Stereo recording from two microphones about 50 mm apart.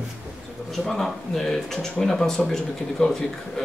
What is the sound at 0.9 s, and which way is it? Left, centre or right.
Speech, centre.